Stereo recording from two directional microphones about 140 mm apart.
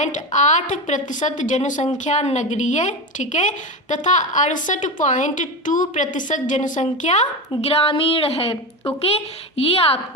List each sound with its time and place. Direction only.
0.0 s a woman's voice: 60° left (ahead or behind)
7.6 s a woman's voice: 45° left (ahead or behind)